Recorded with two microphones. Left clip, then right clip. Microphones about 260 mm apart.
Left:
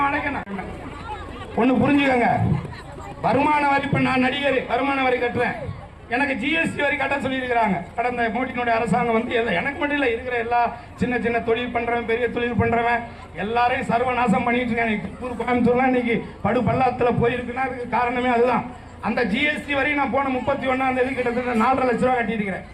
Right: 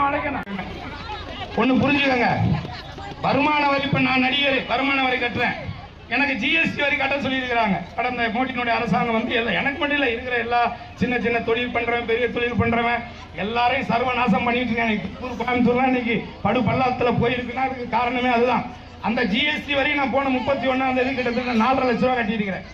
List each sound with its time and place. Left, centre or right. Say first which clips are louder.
0.0 s chatter: even; left
1.5 s a man's voice: even; left